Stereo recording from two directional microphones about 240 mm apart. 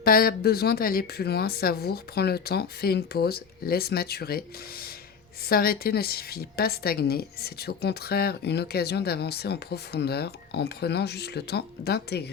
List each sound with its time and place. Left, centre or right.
0.0 s a woman's voice: left